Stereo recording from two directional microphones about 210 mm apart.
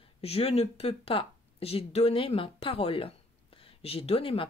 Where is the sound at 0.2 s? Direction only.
30° left (ahead or behind).